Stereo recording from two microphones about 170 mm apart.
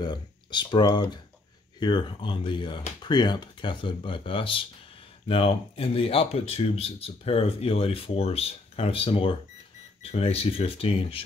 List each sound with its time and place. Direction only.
0.0 s speech: 25° left (ahead or behind)